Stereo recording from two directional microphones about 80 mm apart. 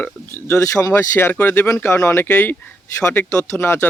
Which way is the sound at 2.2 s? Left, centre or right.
Left.